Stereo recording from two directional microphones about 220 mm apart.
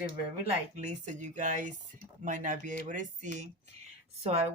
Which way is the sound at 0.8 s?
35° right (ahead or behind).